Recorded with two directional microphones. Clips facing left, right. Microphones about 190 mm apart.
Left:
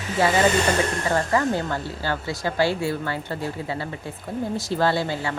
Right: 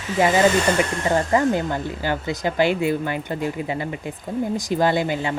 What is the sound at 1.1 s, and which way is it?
A woman's voice, 20° right (ahead or behind).